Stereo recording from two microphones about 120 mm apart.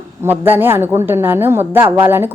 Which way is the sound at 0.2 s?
15° right (ahead or behind).